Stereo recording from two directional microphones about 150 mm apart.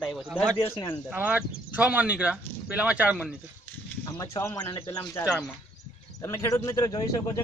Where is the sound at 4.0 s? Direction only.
20° left (ahead or behind).